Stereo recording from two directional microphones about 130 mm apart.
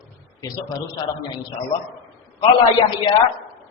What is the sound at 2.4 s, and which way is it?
Speech, 40° left (ahead or behind).